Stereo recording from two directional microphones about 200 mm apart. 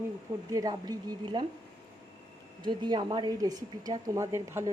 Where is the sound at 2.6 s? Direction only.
20° right (ahead or behind).